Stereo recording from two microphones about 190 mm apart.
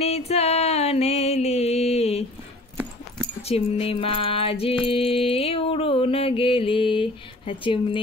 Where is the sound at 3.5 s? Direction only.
30° left (ahead or behind).